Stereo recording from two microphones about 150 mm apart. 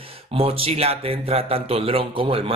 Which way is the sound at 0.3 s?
40° right (ahead or behind).